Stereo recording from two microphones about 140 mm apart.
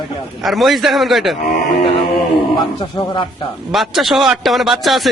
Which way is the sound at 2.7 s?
35° left (ahead or behind).